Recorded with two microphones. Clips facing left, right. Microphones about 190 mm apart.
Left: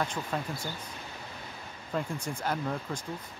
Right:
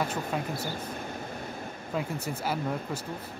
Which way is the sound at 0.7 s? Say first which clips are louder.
Right 7 dB; 50° right (ahead or behind).